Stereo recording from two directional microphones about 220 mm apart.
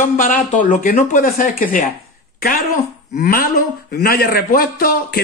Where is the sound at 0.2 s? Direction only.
35° left (ahead or behind).